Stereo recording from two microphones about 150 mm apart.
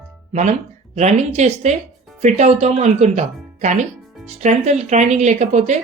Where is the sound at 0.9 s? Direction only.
45° right (ahead or behind).